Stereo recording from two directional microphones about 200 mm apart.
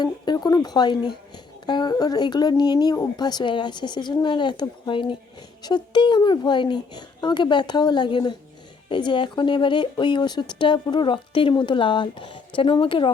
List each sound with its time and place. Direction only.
0.0 s speech: 20° left (ahead or behind)